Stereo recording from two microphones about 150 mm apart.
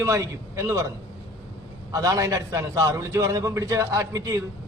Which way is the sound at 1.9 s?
20° right (ahead or behind).